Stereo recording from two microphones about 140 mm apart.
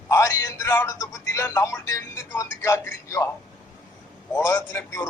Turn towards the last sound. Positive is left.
turn(degrees=20)  # may be behind; listen again after turning